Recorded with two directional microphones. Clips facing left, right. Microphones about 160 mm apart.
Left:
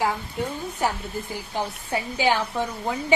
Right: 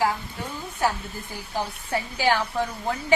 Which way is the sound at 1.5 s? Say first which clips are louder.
Even; 15° left (ahead or behind).